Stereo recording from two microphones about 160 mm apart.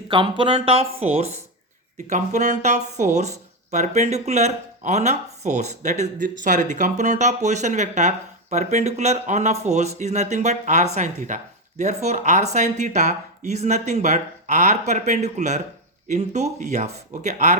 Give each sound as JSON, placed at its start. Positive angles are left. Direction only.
{"t": 0.1, "sound": "speech", "side_deg": -30}